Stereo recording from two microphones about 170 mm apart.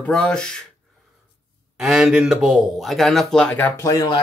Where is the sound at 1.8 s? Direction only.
5° right (ahead or behind); by 4.0 s 15° left (ahead or behind).